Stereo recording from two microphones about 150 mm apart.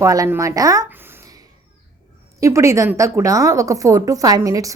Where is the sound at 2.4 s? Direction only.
20° right (ahead or behind).